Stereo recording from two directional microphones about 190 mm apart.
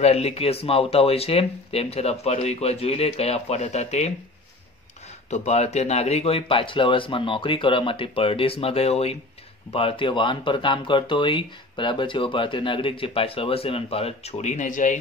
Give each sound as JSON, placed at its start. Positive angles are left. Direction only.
{"t": 0.0, "sound": "speech", "side_deg": 35}
{"t": 5.3, "sound": "speech", "side_deg": 35}